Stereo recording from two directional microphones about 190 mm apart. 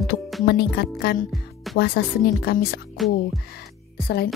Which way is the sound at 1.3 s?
Centre (ahead or behind).